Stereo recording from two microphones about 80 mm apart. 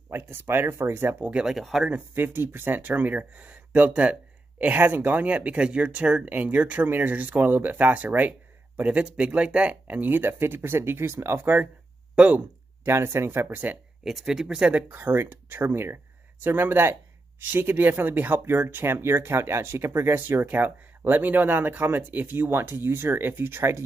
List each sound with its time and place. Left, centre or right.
0.1 s speech: right
1.2 s speech: centre
2.1 s speech: right
12.8 s speech: right
14.0 s speech: centre; by 23.8 s right